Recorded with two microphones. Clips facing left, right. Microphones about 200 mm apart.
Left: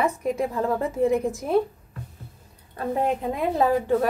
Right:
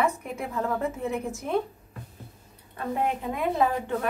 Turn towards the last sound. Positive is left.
turn(degrees=35)  # may be behind; listen again after turning